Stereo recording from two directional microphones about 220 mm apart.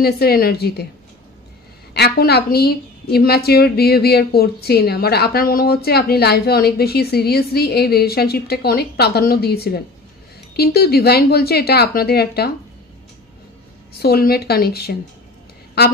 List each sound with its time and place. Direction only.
0.0 s a woman's voice: 45° left (ahead or behind)
2.0 s a woman's voice: 45° left (ahead or behind)
13.9 s a woman's voice: 45° left (ahead or behind)